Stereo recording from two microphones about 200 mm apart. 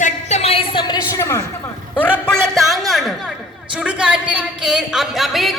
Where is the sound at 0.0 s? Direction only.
35° left (ahead or behind).